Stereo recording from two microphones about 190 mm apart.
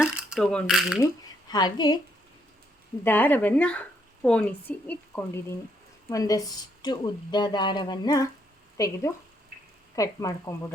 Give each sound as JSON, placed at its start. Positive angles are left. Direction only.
{"t": 0.2, "sound": "mechanisms", "side_deg": -5}
{"t": 1.5, "sound": "speech", "side_deg": 20}
{"t": 3.0, "sound": "a woman's voice", "side_deg": 10}